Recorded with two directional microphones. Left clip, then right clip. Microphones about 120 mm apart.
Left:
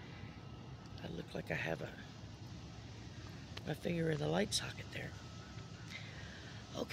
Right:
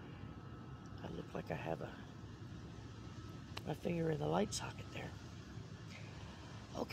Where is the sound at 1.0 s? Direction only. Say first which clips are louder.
Left 1 dB; 20° left (ahead or behind).